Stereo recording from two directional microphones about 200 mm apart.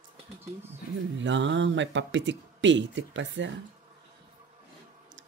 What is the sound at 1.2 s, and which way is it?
Speech, 65° right (ahead or behind).